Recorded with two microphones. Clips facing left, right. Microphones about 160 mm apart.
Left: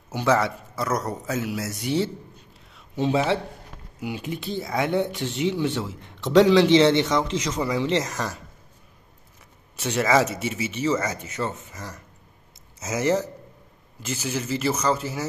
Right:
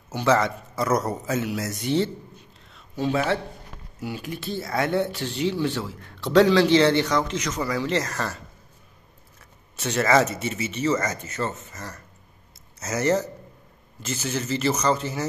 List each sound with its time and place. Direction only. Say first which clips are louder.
0.2 s a man's voice: right 1 dB; 5° left (ahead or behind)
3.0 s speech: left 1 dB; 20° left (ahead or behind)
9.8 s speech: even; 15° left (ahead or behind)